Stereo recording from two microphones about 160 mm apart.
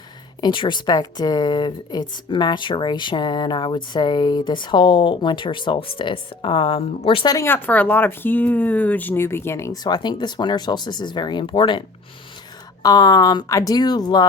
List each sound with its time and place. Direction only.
0.4 s a woman's voice: 30° left (ahead or behind)
7.3 s speech: 15° left (ahead or behind); by 11.8 s 30° left (ahead or behind)
12.8 s a woman's voice: 25° left (ahead or behind)